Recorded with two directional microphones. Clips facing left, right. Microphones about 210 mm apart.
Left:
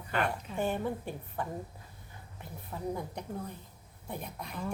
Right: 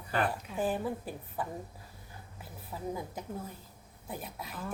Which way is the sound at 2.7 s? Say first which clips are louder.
Left 1 dB; 5° right (ahead or behind).